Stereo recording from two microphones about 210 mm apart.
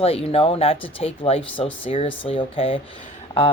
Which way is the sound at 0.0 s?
30° left (ahead or behind).